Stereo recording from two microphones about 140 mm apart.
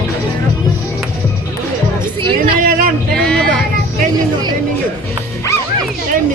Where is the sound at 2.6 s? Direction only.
75° right (ahead or behind).